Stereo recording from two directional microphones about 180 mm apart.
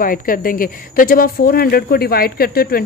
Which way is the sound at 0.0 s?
50° left (ahead or behind).